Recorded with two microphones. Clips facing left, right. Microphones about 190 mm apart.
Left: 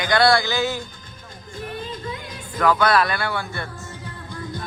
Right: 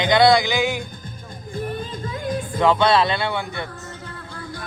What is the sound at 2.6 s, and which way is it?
Speech, 25° right (ahead or behind).